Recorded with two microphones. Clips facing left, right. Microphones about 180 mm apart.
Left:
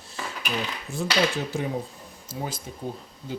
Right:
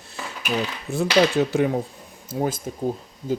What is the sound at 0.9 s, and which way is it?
Speech, 70° right (ahead or behind).